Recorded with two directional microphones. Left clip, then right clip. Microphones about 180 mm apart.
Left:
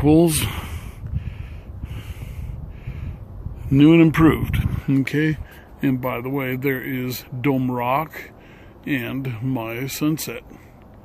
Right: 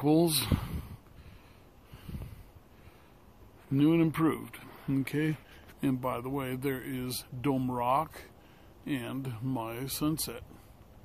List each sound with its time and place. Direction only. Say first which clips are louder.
0.0 s speech: left 10 dB; 5° right (ahead or behind)
3.7 s speech: left 13 dB; centre (ahead or behind); by 10.4 s 25° right (ahead or behind)